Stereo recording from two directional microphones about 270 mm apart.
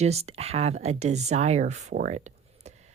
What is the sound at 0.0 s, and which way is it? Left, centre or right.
Speech, right.